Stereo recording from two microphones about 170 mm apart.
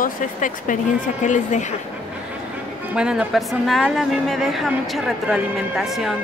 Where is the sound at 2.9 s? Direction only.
5° right (ahead or behind).